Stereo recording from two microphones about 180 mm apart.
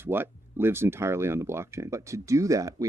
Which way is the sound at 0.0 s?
10° right (ahead or behind).